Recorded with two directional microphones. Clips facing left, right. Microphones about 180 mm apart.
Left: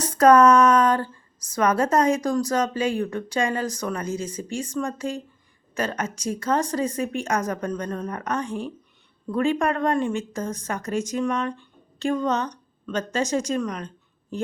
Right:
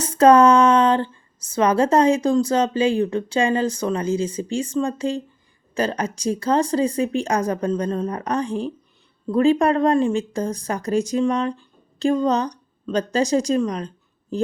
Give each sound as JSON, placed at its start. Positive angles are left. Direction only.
{"t": 0.0, "sound": "a woman's voice", "side_deg": -30}